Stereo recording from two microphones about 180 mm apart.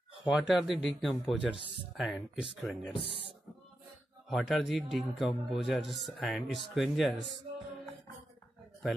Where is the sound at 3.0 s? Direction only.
30° right (ahead or behind).